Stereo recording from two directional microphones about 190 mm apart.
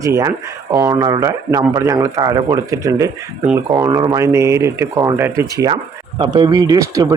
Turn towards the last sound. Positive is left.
turn(degrees=-15)  # may be behind; listen again after turning